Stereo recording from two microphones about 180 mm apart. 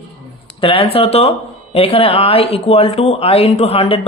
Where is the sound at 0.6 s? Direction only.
30° left (ahead or behind).